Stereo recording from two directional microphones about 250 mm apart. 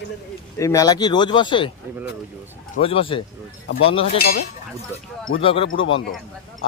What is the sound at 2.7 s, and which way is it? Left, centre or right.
Speech, left.